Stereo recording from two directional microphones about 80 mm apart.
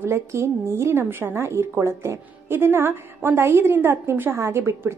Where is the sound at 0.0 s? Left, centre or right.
Right.